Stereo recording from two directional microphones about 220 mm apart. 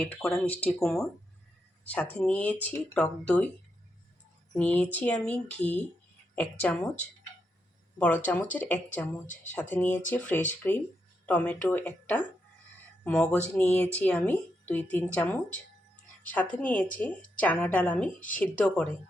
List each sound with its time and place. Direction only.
0.0 s speech: centre (ahead or behind)
4.5 s speech: 5° left (ahead or behind)
7.9 s speech: 5° left (ahead or behind)
9.2 s speech: 35° left (ahead or behind)
9.5 s speech: 10° left (ahead or behind)